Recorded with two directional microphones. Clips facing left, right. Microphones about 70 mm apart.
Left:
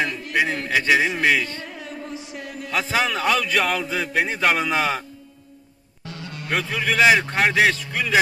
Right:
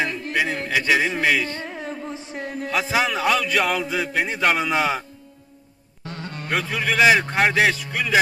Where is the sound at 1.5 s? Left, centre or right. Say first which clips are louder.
Right 3 dB; right.